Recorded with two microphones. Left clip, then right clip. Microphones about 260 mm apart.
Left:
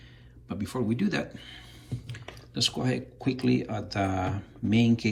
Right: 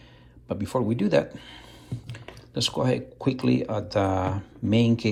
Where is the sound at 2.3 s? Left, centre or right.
Centre.